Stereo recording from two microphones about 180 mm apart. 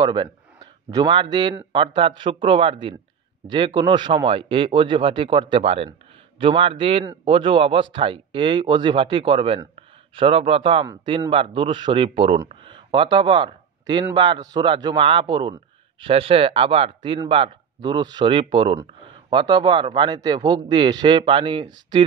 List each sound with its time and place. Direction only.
0.0 s a man's voice: 25° right (ahead or behind)